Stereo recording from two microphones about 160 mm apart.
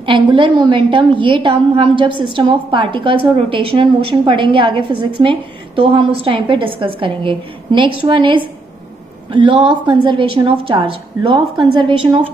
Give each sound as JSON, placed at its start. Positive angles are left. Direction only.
{"t": 0.0, "sound": "a woman's voice", "side_deg": -30}